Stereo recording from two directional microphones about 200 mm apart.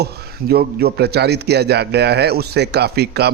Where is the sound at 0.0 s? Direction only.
50° right (ahead or behind).